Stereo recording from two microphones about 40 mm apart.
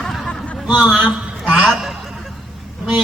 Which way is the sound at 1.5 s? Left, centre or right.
Right.